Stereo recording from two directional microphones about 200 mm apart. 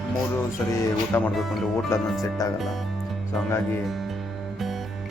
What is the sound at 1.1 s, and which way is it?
Speech, 5° left (ahead or behind).